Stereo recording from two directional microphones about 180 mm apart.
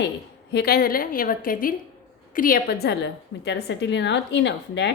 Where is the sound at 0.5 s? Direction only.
60° left (ahead or behind).